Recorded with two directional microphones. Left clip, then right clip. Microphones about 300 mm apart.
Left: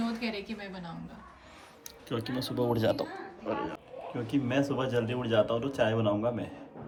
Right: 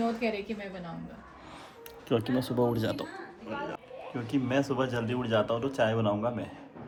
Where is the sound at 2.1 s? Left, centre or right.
Centre.